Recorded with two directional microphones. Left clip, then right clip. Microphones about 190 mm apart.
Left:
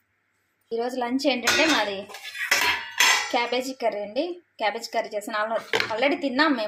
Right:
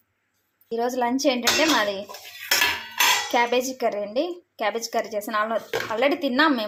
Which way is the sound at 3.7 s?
10° right (ahead or behind).